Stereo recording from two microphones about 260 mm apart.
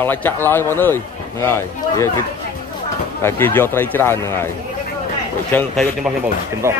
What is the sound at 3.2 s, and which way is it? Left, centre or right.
A man's voice, centre.